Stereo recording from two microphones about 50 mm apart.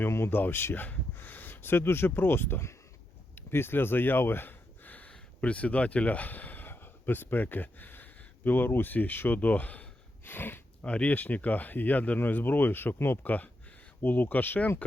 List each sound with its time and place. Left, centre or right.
0.1 s speech: left
3.3 s a sound: left
5.4 s speech: left
10.2 s speech: left
10.8 s speech: left
13.2 s speech: left